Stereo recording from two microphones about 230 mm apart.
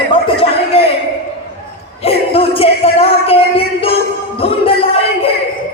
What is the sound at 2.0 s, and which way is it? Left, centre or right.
A man's voice, left.